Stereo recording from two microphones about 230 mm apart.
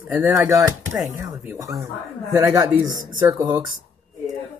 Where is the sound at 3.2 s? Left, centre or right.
Centre.